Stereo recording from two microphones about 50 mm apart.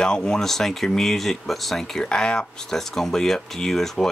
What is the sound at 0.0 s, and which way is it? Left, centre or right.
Speech, centre.